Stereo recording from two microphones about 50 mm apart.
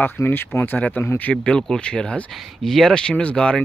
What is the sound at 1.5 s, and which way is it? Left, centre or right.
Speech, centre.